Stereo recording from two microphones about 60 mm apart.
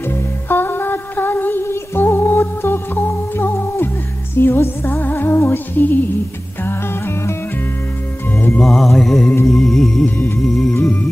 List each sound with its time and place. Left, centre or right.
0.1 s music: left
8.5 s music: centre
10.0 s music: left
10.4 s music: centre
10.8 s music: left